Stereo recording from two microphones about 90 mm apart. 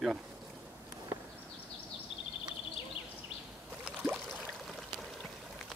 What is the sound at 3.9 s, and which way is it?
Boat, 10° right (ahead or behind).